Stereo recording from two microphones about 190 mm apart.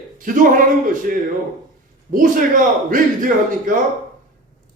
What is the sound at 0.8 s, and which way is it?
A man's voice, 45° right (ahead or behind).